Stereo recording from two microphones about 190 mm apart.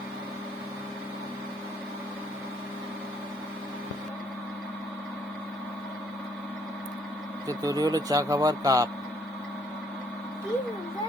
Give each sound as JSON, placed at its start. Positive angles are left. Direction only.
{"t": 7.4, "sound": "speech", "side_deg": -20}